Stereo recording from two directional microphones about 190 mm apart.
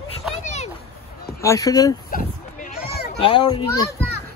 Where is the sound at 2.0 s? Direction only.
45° left (ahead or behind).